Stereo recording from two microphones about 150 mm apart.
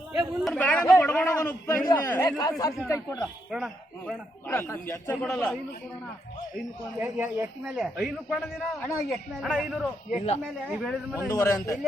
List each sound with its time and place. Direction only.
0.1 s a man's voice: centre (ahead or behind); by 3.2 s 20° left (ahead or behind)
3.5 s a man's voice: 5° right (ahead or behind)
4.4 s a man's voice: 15° left (ahead or behind)
5.1 s a man's voice: 5° left (ahead or behind)
7.0 s speech: 15° right (ahead or behind)
7.8 s a man's voice: centre (ahead or behind)
11.3 s speech: 20° left (ahead or behind)